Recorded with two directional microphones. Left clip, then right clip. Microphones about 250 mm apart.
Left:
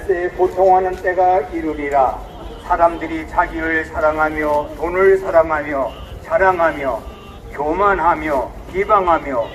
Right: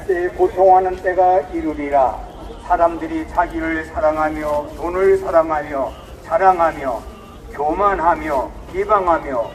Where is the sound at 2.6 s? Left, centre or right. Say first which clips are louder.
Left 1 dB; centre.